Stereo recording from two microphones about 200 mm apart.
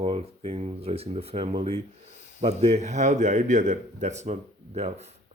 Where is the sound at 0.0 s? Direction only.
30° right (ahead or behind).